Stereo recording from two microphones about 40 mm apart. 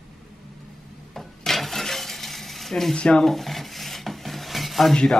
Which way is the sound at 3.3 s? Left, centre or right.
Centre.